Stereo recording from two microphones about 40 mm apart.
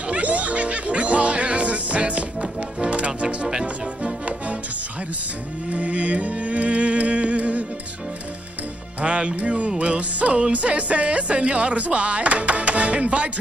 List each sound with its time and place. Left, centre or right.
0.1 s music: right
3.4 s music: centre
5.7 s music: right
9.0 s speech: right